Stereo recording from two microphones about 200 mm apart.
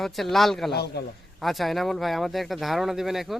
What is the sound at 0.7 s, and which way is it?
Speech, 55° left (ahead or behind).